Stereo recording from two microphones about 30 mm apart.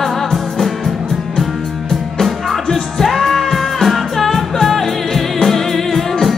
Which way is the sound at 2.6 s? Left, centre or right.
Centre.